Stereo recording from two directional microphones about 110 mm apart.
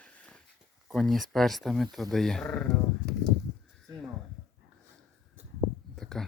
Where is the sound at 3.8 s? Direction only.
5° left (ahead or behind).